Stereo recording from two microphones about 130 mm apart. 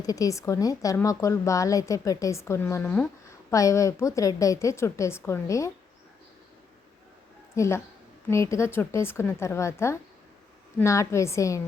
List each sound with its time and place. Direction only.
0.0 s a woman's voice: 25° left (ahead or behind)
7.5 s a woman's voice: 25° left (ahead or behind)